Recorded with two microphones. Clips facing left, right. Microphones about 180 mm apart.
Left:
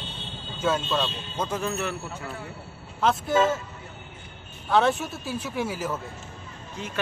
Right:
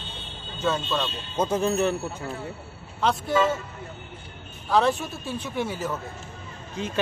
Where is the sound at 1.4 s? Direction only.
25° right (ahead or behind).